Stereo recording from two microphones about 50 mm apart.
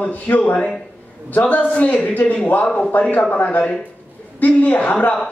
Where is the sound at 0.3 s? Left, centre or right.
Left.